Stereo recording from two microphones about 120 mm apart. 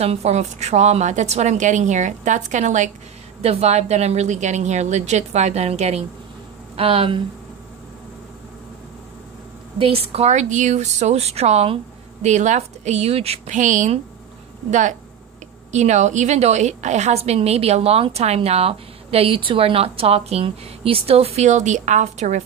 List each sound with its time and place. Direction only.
0.0 s speech: 60° right (ahead or behind); by 2.9 s 90° right
3.4 s speech: 60° right (ahead or behind)
6.8 s speech: 50° right (ahead or behind)
9.8 s speech: 50° right (ahead or behind); by 15.0 s 90° right
15.7 s a woman's voice: 75° right (ahead or behind)